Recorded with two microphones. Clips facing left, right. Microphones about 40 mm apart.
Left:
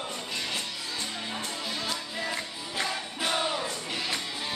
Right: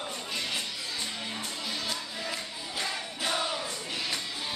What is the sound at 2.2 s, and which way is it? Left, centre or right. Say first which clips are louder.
Music: left 2 dB; centre.